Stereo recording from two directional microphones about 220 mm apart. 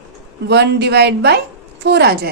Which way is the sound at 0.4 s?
50° right (ahead or behind).